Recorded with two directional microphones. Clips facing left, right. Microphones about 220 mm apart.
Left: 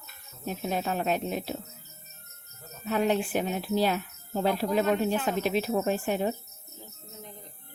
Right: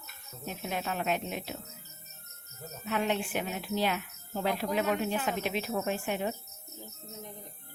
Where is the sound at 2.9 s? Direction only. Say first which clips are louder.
Left 5 dB; 40° left (ahead or behind).